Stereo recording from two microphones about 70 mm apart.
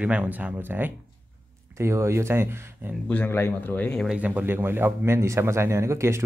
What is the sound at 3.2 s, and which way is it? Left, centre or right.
Speech, left.